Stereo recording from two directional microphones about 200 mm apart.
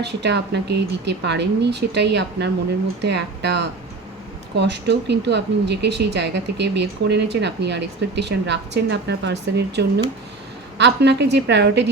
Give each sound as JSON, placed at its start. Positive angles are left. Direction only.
{"t": 0.0, "sound": "speech", "side_deg": -60}